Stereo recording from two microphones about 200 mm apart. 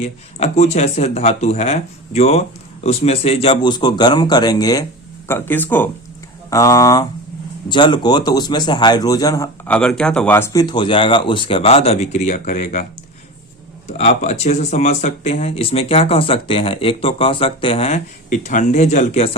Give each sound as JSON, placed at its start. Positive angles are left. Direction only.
{"t": 0.3, "sound": "a man's voice", "side_deg": 30}
{"t": 13.8, "sound": "speech", "side_deg": 35}